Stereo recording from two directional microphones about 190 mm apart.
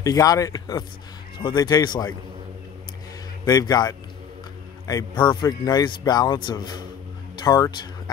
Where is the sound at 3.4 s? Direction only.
20° left (ahead or behind).